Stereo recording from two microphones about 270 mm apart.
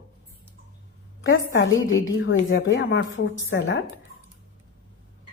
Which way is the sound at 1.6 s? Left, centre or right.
Left.